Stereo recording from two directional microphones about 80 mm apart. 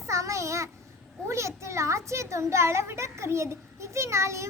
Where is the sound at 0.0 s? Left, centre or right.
Right.